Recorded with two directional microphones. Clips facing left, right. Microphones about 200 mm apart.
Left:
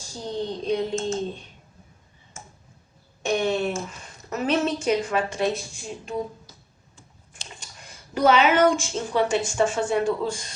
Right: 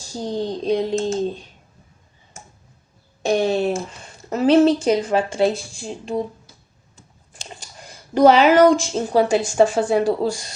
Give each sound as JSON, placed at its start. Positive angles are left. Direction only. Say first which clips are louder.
{"t": 0.1, "sound": "speech", "louder": "right 5 dB", "side_deg": -35}
{"t": 3.2, "sound": "speech", "louder": "right 5 dB", "side_deg": -35}
{"t": 7.6, "sound": "speech", "louder": "right 5 dB", "side_deg": -35}